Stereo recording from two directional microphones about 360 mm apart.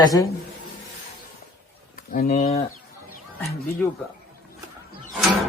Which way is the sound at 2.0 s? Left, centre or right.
Left.